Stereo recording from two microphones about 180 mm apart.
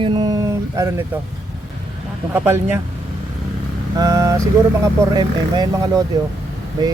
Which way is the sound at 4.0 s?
20° right (ahead or behind).